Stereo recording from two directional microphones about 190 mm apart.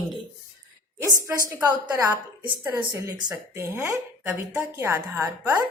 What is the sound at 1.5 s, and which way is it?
Speech, 15° right (ahead or behind).